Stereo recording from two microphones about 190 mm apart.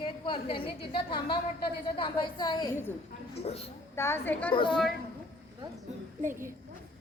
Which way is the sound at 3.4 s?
35° left (ahead or behind).